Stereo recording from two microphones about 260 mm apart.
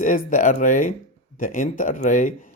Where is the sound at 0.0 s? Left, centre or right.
Left.